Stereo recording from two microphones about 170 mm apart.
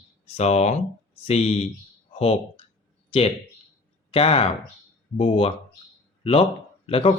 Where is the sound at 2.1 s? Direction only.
35° left (ahead or behind).